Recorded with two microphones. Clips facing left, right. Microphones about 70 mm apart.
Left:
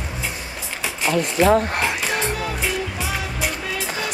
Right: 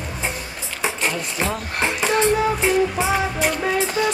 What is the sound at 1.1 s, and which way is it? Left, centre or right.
Speech, left.